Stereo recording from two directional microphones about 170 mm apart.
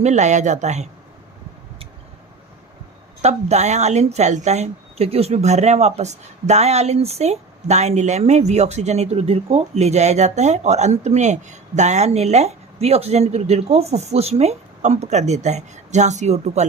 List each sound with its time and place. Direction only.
0.0 s speech: 45° right (ahead or behind)
3.2 s speech: 40° right (ahead or behind)